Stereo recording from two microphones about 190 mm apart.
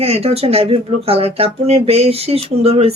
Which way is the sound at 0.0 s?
30° right (ahead or behind).